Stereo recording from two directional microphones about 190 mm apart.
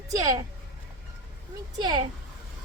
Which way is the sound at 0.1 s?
20° right (ahead or behind).